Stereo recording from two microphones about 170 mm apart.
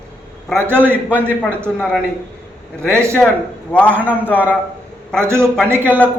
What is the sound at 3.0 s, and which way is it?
A man's voice, 15° right (ahead or behind).